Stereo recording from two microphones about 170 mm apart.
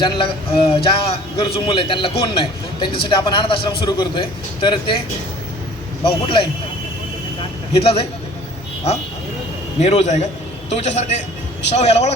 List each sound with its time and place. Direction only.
0.0 s a man's voice: 30° left (ahead or behind)
6.1 s a man's voice: 30° left (ahead or behind)
7.8 s a man's voice: 35° left (ahead or behind)
9.8 s a man's voice: 40° left (ahead or behind)